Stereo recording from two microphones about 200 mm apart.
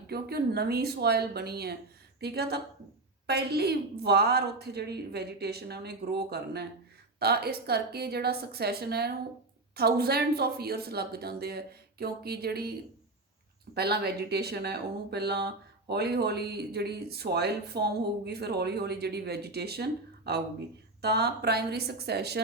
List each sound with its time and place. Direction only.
0.1 s speech: 50° right (ahead or behind)
13.7 s speech: 55° right (ahead or behind)